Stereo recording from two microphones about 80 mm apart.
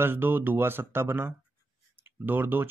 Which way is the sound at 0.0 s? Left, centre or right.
Right.